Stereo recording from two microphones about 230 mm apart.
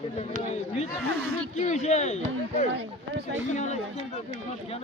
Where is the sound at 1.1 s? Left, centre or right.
Right.